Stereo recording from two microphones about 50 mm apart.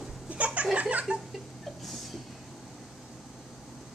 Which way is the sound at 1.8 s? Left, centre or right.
Centre.